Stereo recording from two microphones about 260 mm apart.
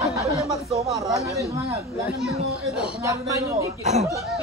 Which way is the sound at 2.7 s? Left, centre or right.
Centre.